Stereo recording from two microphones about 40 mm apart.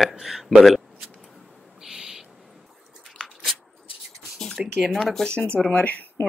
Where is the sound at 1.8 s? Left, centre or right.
Centre.